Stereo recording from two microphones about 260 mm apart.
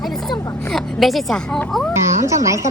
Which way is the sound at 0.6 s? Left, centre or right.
Centre.